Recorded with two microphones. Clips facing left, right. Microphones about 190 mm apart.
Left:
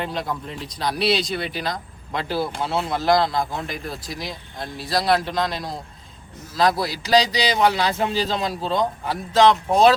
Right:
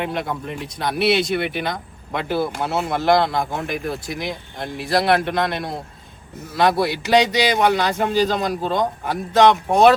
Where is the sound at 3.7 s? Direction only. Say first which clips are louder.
Right 5 dB; 60° right (ahead or behind).